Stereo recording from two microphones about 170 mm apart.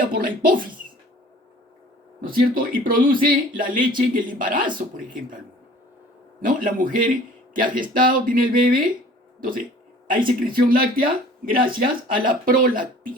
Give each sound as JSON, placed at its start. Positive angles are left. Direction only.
{"t": 0.0, "sound": "speech", "side_deg": -55}
{"t": 2.2, "sound": "speech", "side_deg": -55}
{"t": 6.4, "sound": "speech", "side_deg": -50}
{"t": 10.1, "sound": "speech", "side_deg": -55}